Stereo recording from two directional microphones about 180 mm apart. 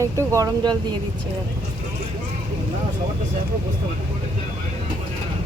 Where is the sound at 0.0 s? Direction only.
15° right (ahead or behind).